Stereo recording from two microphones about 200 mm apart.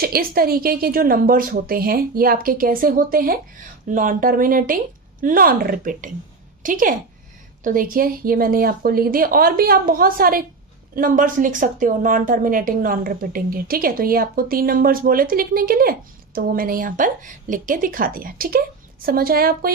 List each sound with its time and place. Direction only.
0.0 s a woman's voice: 50° right (ahead or behind)